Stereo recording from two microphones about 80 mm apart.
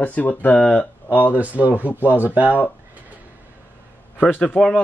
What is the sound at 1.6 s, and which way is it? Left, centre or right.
Speech, right.